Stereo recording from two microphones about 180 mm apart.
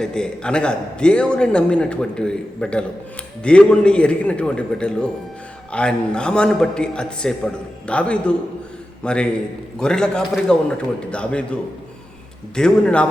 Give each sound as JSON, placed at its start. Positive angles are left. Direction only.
{"t": 0.0, "sound": "a man's voice", "side_deg": 5}
{"t": 12.5, "sound": "a man's voice", "side_deg": 5}